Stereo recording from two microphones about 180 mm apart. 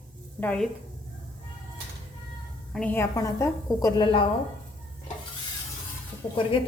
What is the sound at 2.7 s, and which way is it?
A woman's voice, 10° left (ahead or behind).